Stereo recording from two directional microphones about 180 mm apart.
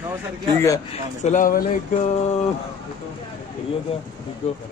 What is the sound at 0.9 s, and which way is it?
Speech, 40° left (ahead or behind).